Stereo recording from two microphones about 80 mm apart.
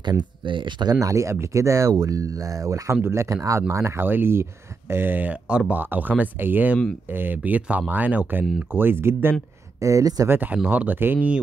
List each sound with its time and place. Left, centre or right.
0.1 s speech: right
0.9 s speech: right
9.8 s speech: right
10.2 s speech: right
10.5 s speech: centre